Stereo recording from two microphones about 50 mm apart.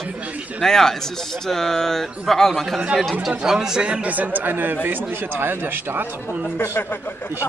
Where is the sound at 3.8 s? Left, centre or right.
Right.